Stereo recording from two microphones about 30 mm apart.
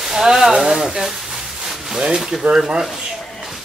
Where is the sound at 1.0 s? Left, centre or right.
Centre.